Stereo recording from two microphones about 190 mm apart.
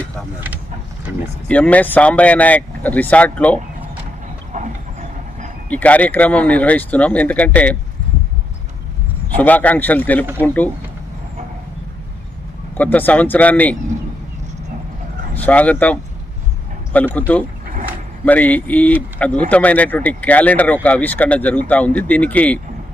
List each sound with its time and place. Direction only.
0.3 s speech: 10° right (ahead or behind)
1.5 s speech: 5° left (ahead or behind)
4.5 s train: 40° right (ahead or behind)
5.6 s speech: 10° left (ahead or behind)
9.3 s speech: 10° left (ahead or behind)
12.7 s speech: 10° left (ahead or behind)
15.4 s speech: 10° left (ahead or behind)